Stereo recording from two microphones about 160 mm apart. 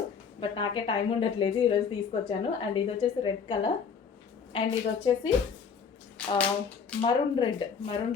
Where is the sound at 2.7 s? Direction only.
30° left (ahead or behind).